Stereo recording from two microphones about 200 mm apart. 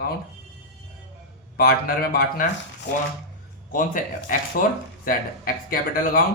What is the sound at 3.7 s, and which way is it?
Speech, 40° left (ahead or behind).